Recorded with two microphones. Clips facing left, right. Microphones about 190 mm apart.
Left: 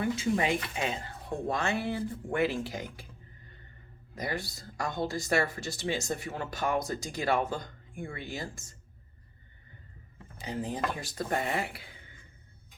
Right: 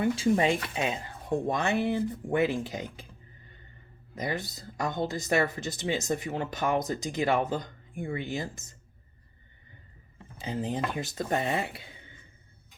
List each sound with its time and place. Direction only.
0.0 s speech: 30° right (ahead or behind)
4.1 s speech: 20° right (ahead or behind)
10.4 s speech: 20° right (ahead or behind)